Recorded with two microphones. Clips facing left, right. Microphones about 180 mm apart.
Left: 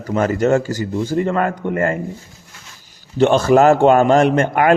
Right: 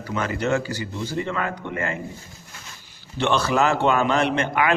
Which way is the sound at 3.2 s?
45° left (ahead or behind).